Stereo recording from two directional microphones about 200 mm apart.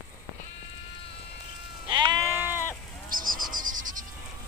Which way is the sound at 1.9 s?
25° right (ahead or behind).